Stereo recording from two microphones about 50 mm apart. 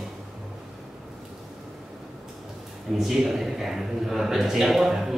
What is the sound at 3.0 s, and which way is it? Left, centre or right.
A man's voice, centre.